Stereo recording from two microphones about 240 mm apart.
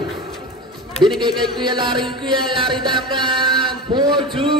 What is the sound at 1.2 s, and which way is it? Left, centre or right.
Music, centre.